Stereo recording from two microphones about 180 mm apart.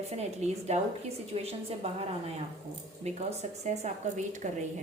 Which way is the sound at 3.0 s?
40° right (ahead or behind).